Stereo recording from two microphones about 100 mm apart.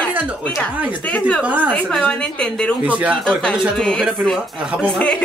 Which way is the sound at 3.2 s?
10° left (ahead or behind).